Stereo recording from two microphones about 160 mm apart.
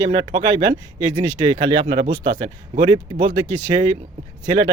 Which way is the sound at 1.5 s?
30° right (ahead or behind).